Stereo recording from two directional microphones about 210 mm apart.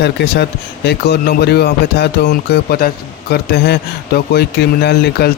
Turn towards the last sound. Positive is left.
turn(degrees=50)  # may be behind; listen again after turning